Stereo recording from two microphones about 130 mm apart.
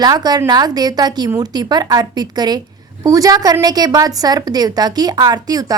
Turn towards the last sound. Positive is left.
turn(degrees=-30)  # may be behind; listen again after turning